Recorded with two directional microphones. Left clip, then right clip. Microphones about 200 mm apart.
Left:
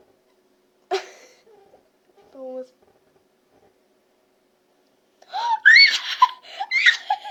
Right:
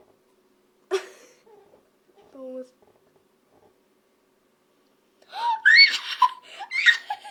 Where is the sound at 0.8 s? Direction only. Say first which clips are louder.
Left 2 dB; 35° right (ahead or behind).